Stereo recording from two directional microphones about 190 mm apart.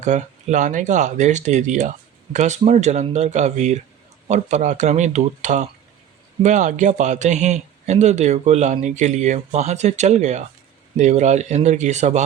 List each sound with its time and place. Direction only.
0.0 s speech: 40° right (ahead or behind)